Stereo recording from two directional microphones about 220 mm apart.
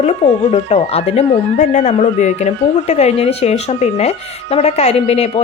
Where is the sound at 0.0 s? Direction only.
30° left (ahead or behind).